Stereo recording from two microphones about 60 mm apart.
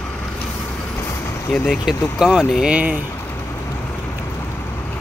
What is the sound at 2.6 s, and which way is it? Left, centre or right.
Speech, right.